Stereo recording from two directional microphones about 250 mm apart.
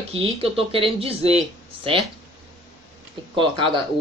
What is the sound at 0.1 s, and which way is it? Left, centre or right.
Speech, right.